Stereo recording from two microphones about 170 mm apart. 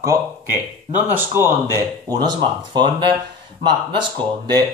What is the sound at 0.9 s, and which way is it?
Speech, 10° right (ahead or behind).